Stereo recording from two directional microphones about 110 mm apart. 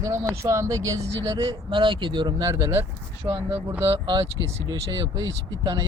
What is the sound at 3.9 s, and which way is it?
Speech, 45° right (ahead or behind).